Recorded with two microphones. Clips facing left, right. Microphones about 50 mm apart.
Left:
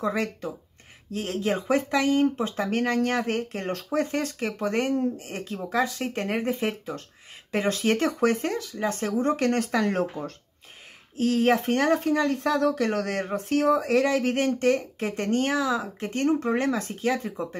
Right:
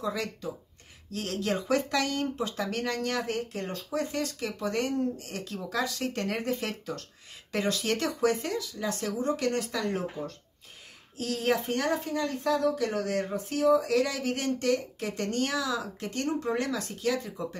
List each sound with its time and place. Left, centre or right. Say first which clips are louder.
0.0 s speech: left 5 dB; left
1.1 s speech: left 4 dB; left
11.1 s speech: left 6 dB; left